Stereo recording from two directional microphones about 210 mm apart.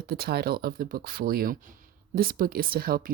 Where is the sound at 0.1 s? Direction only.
45° right (ahead or behind).